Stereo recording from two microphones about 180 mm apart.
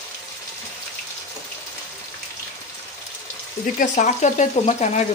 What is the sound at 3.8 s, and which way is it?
Speech, 45° left (ahead or behind).